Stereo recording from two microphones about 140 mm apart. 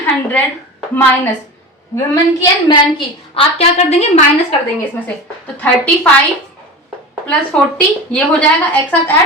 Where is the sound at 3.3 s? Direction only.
50° left (ahead or behind).